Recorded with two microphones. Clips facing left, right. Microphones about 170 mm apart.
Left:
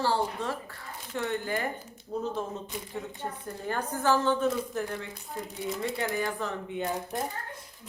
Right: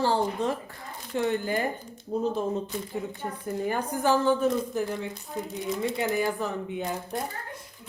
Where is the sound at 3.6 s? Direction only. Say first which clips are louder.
Right 1 dB; 15° right (ahead or behind).